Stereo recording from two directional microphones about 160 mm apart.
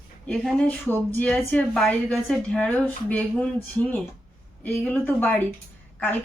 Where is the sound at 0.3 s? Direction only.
Centre (ahead or behind).